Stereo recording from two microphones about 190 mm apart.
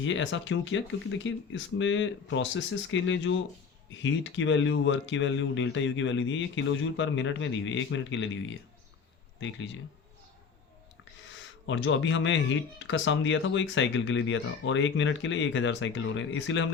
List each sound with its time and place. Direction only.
0.0 s speech: 75° left (ahead or behind)
11.3 s speech: 80° left